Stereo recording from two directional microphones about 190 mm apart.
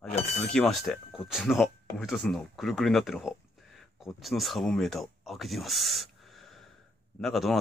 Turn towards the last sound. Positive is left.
turn(degrees=0)  # may be behind; listen again after turning